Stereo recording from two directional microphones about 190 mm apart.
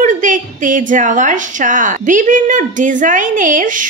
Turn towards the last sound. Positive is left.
turn(degrees=-45)  # may be behind; listen again after turning